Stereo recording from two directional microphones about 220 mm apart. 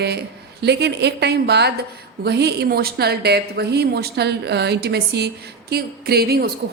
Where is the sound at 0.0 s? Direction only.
50° right (ahead or behind).